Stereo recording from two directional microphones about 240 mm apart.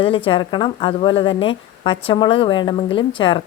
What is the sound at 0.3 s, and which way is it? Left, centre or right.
A woman's voice, left.